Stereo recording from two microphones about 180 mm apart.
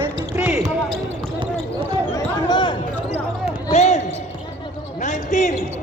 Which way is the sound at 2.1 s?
25° left (ahead or behind).